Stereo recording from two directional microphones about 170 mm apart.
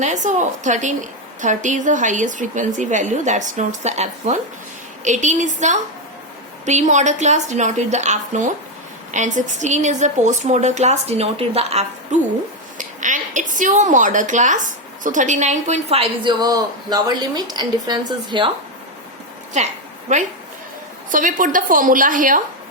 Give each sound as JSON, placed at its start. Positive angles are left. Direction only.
{"t": 0.0, "sound": "a woman's voice", "side_deg": -45}
{"t": 16.4, "sound": "a woman's voice", "side_deg": -20}
{"t": 19.6, "sound": "a woman's voice", "side_deg": -45}